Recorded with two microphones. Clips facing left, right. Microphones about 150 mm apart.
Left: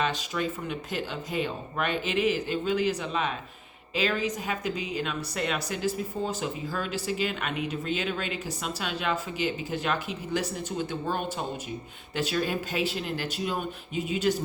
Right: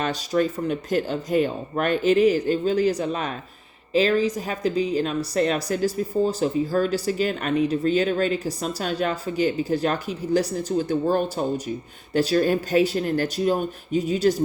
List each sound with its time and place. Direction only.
0.0 s a woman's voice: 40° right (ahead or behind)